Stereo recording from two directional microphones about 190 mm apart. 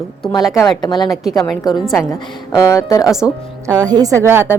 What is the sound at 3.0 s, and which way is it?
A woman's voice, 5° right (ahead or behind).